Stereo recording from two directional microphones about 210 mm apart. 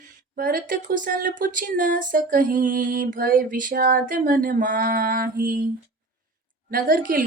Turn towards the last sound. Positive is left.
turn(degrees=-40)  # may be behind; listen again after turning